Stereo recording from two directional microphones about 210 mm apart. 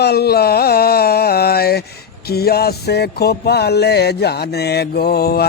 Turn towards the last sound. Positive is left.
turn(degrees=50)  # may be behind; listen again after turning